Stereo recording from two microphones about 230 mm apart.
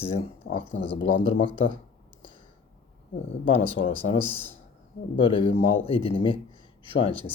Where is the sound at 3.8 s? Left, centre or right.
Left.